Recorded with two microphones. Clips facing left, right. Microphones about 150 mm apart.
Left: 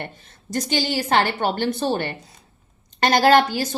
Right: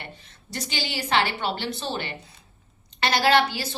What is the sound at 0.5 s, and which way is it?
A woman's voice, 45° left (ahead or behind).